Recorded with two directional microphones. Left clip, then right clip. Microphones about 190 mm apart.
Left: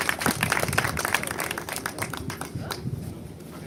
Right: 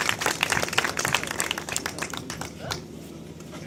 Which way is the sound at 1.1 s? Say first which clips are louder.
Right 1 dB; 55° left (ahead or behind).